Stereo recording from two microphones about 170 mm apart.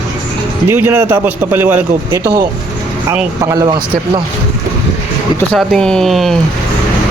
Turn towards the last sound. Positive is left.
turn(degrees=0)  # may be behind; listen again after turning